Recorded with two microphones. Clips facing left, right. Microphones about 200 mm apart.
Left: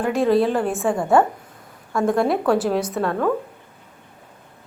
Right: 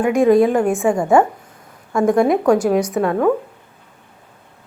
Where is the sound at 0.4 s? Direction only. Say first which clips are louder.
Right 5 dB; 10° right (ahead or behind).